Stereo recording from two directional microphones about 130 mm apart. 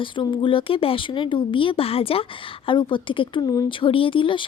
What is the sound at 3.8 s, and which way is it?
Speech, 40° left (ahead or behind).